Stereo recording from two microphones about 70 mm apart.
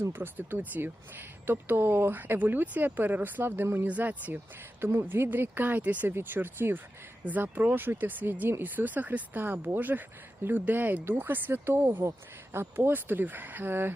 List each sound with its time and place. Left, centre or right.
0.0 s speech: right